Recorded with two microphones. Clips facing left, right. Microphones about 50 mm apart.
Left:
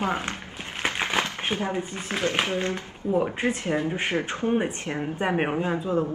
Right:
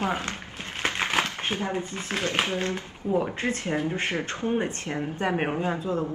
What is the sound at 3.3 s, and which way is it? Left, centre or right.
Speech, centre.